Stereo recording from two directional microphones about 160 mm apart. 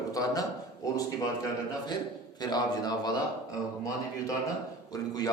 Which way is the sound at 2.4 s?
25° left (ahead or behind).